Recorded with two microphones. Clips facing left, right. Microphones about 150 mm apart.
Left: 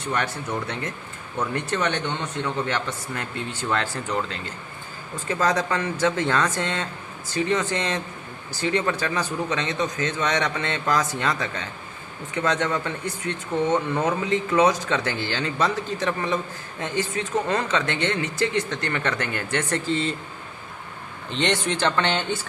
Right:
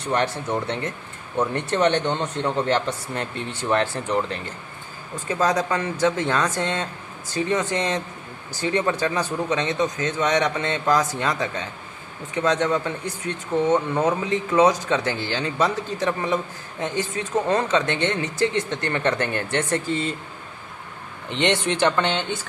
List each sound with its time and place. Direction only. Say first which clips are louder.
0.0 s speech: right 4 dB; 30° right (ahead or behind)
1.4 s speech: right 4 dB; 25° right (ahead or behind)
5.3 s a man's voice: right 1 dB; 15° right (ahead or behind)
17.5 s speech: right 3 dB; 20° right (ahead or behind)
21.2 s speech: right 2 dB; 20° right (ahead or behind)